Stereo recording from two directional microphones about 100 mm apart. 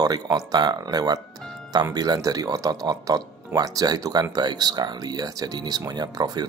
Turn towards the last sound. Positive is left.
turn(degrees=-40)  # may be behind; listen again after turning